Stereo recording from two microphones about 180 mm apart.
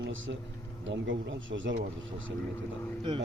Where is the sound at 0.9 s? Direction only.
90° right.